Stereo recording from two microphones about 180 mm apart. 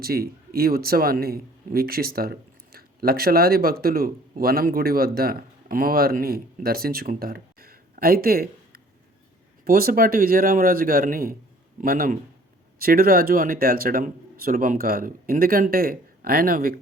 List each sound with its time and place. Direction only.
0.0 s a man's voice: 55° right (ahead or behind)